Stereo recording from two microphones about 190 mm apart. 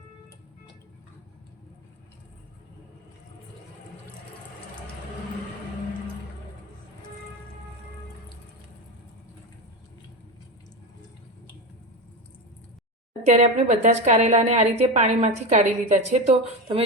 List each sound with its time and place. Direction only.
13.2 s a woman's voice: 35° right (ahead or behind)